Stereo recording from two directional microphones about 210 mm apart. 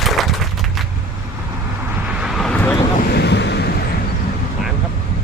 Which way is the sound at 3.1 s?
55° left (ahead or behind).